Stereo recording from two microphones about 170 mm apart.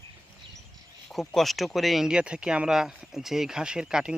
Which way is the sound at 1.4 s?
Centre (ahead or behind).